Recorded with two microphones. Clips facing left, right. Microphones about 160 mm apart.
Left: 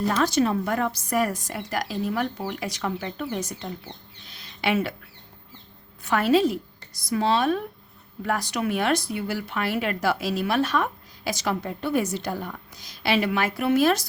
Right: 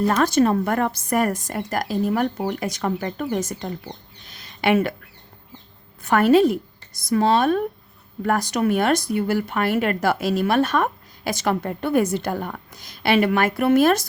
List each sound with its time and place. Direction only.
0.1 s speech: 50° right (ahead or behind)
6.0 s a woman's voice: 50° right (ahead or behind)